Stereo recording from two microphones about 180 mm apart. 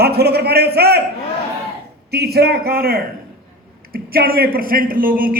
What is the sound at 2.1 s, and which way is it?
A man's voice, 60° right (ahead or behind).